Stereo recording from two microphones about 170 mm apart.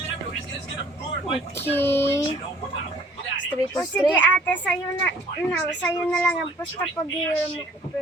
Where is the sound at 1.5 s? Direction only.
15° left (ahead or behind).